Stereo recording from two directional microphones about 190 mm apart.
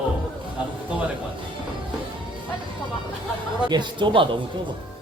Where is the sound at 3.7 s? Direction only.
25° right (ahead or behind).